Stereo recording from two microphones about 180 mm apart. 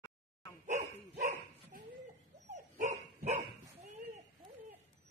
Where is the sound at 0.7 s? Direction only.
40° right (ahead or behind).